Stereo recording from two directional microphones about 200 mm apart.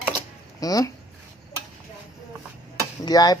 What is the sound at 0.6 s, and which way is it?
Speech, 20° left (ahead or behind).